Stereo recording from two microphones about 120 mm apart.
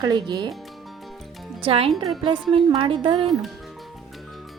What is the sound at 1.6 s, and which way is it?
Speech, 55° right (ahead or behind).